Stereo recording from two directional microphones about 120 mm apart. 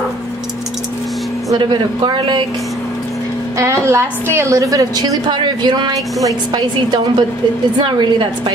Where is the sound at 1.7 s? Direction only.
40° right (ahead or behind).